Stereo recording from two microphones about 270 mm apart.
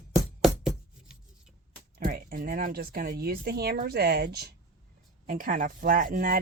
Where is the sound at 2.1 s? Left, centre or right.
Right.